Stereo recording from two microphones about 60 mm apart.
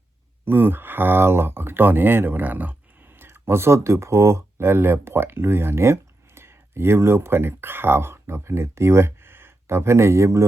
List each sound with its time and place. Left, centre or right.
0.4 s speech: right
3.2 s speech: right